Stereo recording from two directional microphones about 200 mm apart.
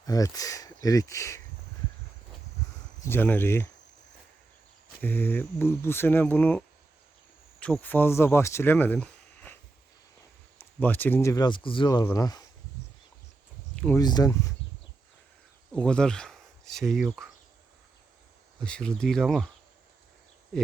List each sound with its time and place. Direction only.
0.0 s speech: 15° left (ahead or behind)
3.0 s speech: 10° left (ahead or behind)
4.9 s speech: 10° left (ahead or behind)
10.6 s speech: 10° left (ahead or behind)
14.0 s speech: 20° left (ahead or behind)
15.7 s speech: 5° left (ahead or behind)
18.6 s speech: 5° left (ahead or behind)
20.5 s a sound: 5° left (ahead or behind)